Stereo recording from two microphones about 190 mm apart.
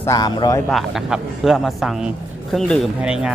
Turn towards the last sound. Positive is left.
turn(degrees=-5)  # may be behind; listen again after turning